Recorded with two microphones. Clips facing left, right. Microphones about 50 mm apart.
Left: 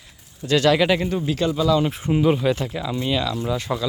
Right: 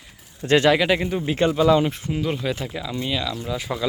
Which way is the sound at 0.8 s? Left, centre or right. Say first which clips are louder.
Left 1 dB; centre.